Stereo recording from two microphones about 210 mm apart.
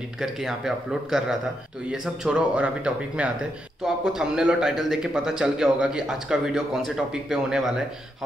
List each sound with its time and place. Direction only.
0.2 s a man's voice: centre (ahead or behind)